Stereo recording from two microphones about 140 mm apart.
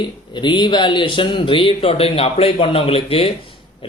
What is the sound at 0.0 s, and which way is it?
Speech, 35° left (ahead or behind).